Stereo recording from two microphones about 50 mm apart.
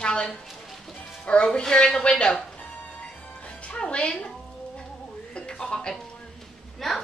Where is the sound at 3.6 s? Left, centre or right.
Centre.